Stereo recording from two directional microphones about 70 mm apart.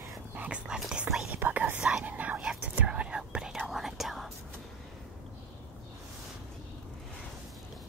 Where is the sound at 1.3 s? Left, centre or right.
Right; by 4.3 s centre.